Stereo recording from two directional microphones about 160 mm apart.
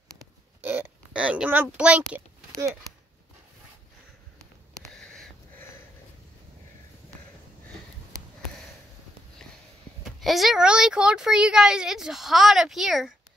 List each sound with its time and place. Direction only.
0.6 s a child's voice: 10° right (ahead or behind)
2.5 s speech: 20° right (ahead or behind)
4.4 s a sound: 5° left (ahead or behind)
10.0 s speech: centre (ahead or behind)